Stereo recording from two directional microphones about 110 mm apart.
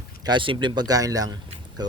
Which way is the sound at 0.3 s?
45° right (ahead or behind).